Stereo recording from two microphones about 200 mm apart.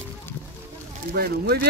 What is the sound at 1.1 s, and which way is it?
Speech, 50° right (ahead or behind).